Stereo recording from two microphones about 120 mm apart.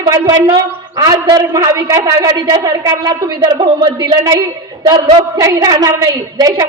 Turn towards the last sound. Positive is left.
turn(degrees=-30)  # may be behind; listen again after turning